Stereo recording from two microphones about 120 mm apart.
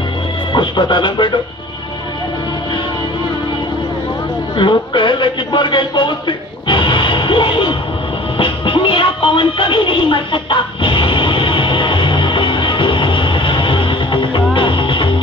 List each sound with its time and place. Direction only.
0.5 s speech: 40° left (ahead or behind)
4.6 s a man's voice: 45° left (ahead or behind)
8.4 s music: 45° left (ahead or behind)